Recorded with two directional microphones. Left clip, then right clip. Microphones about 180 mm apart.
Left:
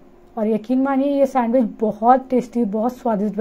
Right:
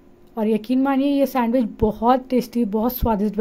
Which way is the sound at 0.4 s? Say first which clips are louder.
Left 1 dB; 30° right (ahead or behind).